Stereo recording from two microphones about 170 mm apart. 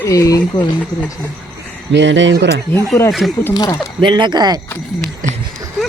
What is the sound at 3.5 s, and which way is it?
Speech, 25° left (ahead or behind).